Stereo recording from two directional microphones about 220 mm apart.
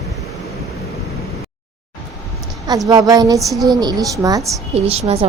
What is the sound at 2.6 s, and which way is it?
A woman's voice, 15° right (ahead or behind).